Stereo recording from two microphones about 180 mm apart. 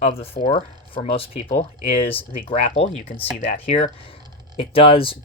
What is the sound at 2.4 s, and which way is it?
Speech, 35° left (ahead or behind).